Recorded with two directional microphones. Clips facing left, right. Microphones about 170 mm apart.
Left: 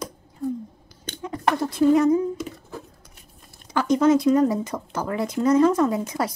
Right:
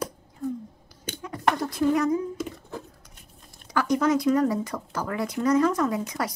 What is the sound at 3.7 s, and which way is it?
Speech, 25° left (ahead or behind).